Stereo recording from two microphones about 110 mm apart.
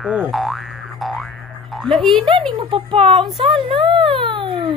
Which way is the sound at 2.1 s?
50° right (ahead or behind).